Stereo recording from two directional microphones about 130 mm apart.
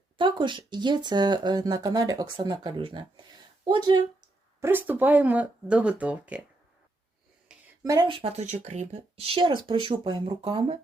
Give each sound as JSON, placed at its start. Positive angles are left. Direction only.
{"t": 0.2, "sound": "speech", "side_deg": -40}
{"t": 4.6, "sound": "speech", "side_deg": -15}
{"t": 7.5, "sound": "a sound", "side_deg": -5}
{"t": 7.9, "sound": "speech", "side_deg": -30}
{"t": 8.2, "sound": "speech", "side_deg": -55}